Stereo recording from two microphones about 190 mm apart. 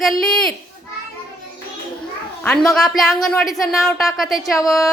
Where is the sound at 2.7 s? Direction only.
Centre (ahead or behind).